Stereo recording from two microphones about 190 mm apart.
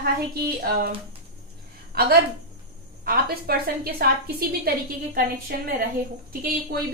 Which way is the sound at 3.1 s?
55° right (ahead or behind).